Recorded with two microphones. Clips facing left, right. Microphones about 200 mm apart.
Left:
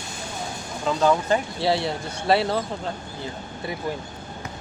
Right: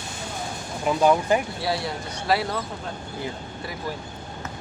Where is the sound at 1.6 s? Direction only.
25° left (ahead or behind).